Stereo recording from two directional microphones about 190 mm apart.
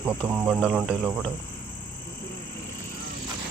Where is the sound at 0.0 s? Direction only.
5° right (ahead or behind).